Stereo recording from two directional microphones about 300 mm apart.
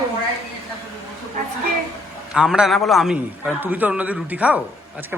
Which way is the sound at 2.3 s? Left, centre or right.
Centre.